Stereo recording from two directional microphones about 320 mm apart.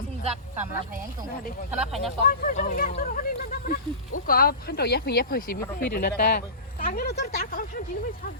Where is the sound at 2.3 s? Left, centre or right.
Left.